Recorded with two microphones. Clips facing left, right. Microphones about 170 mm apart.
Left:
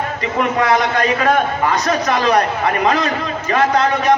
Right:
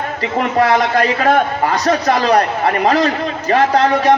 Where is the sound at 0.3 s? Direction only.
30° right (ahead or behind).